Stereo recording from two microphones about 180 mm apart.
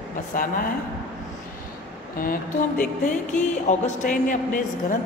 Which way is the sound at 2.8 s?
45° left (ahead or behind).